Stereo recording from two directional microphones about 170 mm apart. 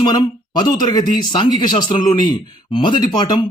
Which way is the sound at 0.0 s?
25° left (ahead or behind).